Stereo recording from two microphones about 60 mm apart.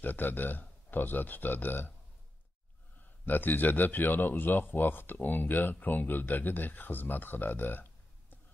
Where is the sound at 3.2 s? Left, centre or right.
Left.